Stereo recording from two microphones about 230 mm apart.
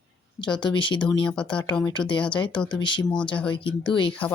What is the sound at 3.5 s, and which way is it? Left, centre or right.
Speech, left.